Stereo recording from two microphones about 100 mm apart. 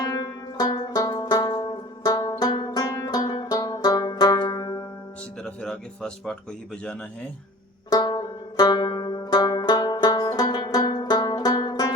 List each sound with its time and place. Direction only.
0.2 s music: 45° left (ahead or behind)
5.6 s speech: 5° left (ahead or behind)
7.9 s music: 40° left (ahead or behind)